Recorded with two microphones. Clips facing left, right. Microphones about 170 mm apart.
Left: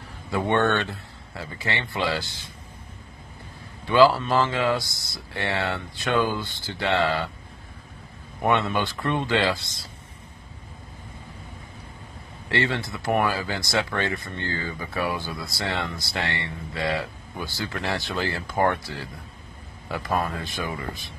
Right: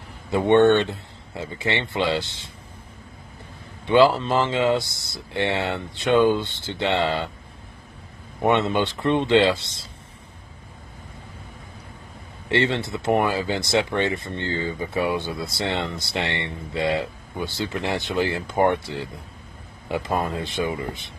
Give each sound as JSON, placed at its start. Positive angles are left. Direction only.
{"t": 0.3, "sound": "speech", "side_deg": -20}
{"t": 3.8, "sound": "speech", "side_deg": -20}
{"t": 8.4, "sound": "speech", "side_deg": -20}
{"t": 12.4, "sound": "speech", "side_deg": -25}